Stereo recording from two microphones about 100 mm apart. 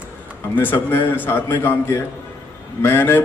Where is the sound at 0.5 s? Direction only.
20° left (ahead or behind).